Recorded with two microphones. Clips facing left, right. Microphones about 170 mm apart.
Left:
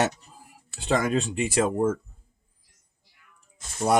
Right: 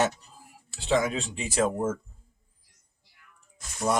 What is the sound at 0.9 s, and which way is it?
Speech, 50° left (ahead or behind).